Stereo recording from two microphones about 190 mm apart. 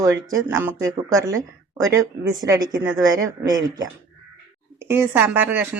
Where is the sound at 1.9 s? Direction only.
20° right (ahead or behind).